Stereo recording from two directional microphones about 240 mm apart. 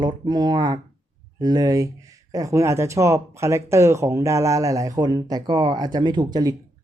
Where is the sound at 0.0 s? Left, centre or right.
Centre.